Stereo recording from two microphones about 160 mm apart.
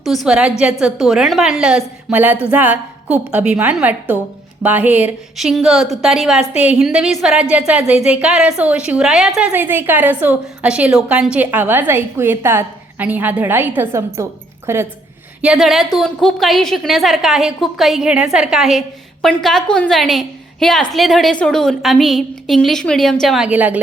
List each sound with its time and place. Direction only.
0.0 s a woman's voice: centre (ahead or behind)
15.4 s a woman's voice: 5° right (ahead or behind)